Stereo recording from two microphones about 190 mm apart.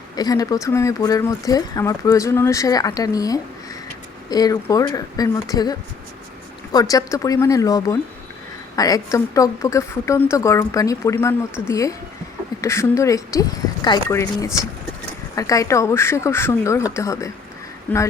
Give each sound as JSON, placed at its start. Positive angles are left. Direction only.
{"t": 0.2, "sound": "speech", "side_deg": 20}
{"t": 6.7, "sound": "speech", "side_deg": 20}